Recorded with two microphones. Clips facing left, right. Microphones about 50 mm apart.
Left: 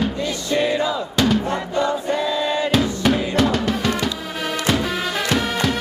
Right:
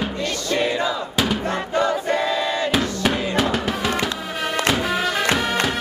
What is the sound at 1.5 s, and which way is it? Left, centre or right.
Choir, right.